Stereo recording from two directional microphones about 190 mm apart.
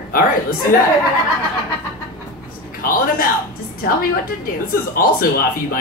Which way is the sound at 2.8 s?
50° left (ahead or behind).